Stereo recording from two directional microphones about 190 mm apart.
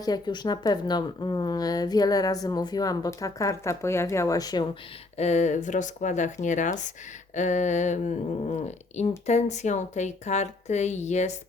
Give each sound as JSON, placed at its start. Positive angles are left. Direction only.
{"t": 0.0, "sound": "a woman's voice", "side_deg": 20}
{"t": 5.1, "sound": "speech", "side_deg": 35}